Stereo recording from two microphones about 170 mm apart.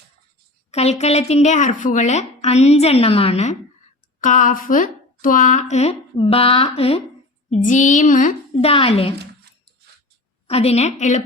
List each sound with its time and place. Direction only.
0.7 s a woman's voice: 40° left (ahead or behind)
7.5 s a woman's voice: 50° left (ahead or behind)
8.7 s a woman's voice: 35° left (ahead or behind)
10.4 s a woman's voice: 35° left (ahead or behind)